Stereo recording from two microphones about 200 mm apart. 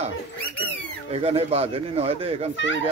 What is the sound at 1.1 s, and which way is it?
Speech, 30° right (ahead or behind).